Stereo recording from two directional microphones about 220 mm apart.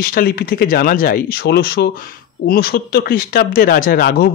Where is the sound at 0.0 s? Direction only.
45° left (ahead or behind).